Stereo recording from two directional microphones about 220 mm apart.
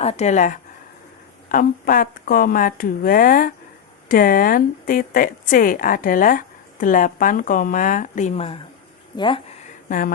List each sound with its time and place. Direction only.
0.0 s speech: 30° left (ahead or behind)